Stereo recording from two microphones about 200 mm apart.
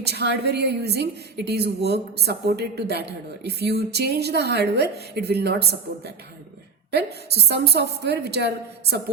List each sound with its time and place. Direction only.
0.0 s a woman's voice: 55° right (ahead or behind)
6.9 s a woman's voice: 55° right (ahead or behind)